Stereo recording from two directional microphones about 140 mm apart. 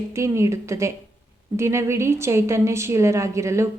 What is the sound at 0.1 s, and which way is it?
A woman's voice, 20° right (ahead or behind).